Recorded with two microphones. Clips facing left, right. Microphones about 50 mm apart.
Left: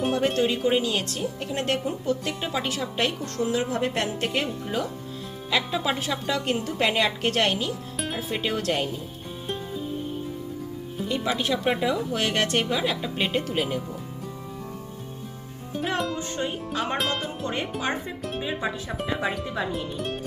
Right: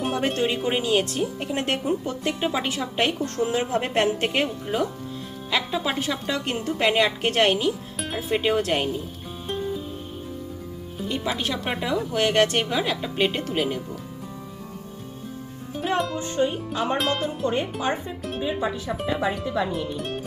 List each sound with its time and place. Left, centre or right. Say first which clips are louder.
0.0 s speech: left 1 dB; centre
3.0 s a woman's voice: right 3 dB; right
4.4 s speech: right 3 dB; centre
7.9 s music: even; centre
8.3 s a woman's voice: right 6 dB; centre
11.1 s speech: left 1 dB; centre
15.7 s music: right 2 dB; centre
18.9 s speech: right 2 dB; centre